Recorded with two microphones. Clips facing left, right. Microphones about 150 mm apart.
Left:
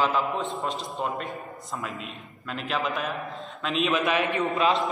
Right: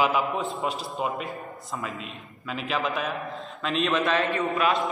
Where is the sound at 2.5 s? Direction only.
Centre (ahead or behind); by 4.5 s 15° left (ahead or behind).